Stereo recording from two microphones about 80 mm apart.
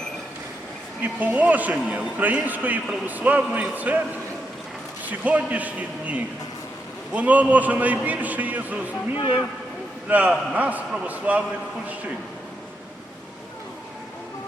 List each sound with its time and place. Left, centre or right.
1.0 s a man's voice: centre
5.2 s a man's voice: centre
10.1 s a man's voice: centre